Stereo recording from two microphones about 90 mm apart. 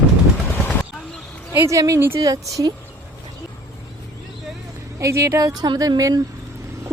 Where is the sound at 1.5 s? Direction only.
35° right (ahead or behind).